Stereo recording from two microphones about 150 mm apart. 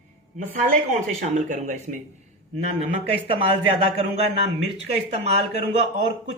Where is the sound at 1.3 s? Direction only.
55° right (ahead or behind).